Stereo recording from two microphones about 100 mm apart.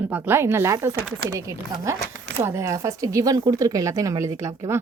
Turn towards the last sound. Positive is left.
turn(degrees=-30)  # may be behind; listen again after turning